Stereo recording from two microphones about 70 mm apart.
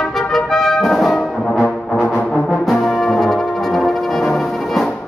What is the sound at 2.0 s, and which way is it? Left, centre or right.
Brass instrument, left.